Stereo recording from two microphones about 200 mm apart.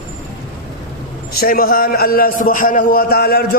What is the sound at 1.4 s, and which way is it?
A man's voice, 45° left (ahead or behind).